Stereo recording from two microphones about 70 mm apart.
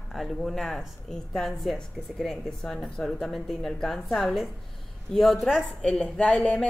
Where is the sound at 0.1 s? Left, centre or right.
Centre.